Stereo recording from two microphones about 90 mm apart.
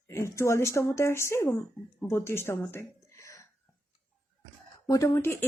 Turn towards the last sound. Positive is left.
turn(degrees=30)  # may be behind; listen again after turning